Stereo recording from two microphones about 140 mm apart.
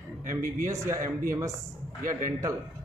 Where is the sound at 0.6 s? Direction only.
20° right (ahead or behind).